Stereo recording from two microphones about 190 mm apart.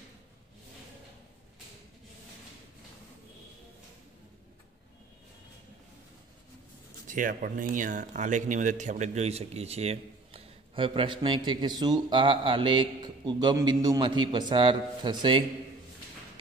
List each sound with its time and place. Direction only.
7.1 s speech: 45° right (ahead or behind); by 15.4 s 25° right (ahead or behind)